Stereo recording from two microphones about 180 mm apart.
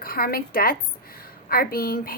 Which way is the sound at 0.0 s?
55° left (ahead or behind).